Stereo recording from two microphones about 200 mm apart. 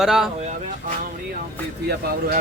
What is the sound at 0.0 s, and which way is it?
Speech, centre (ahead or behind).